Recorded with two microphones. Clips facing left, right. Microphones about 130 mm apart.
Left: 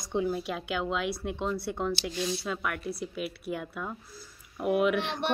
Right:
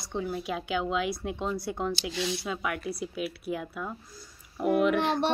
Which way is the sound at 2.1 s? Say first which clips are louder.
Even; 75° right (ahead or behind).